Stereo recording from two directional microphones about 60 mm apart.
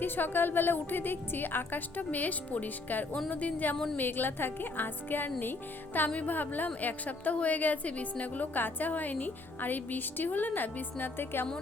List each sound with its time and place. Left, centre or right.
0.0 s a woman's voice: left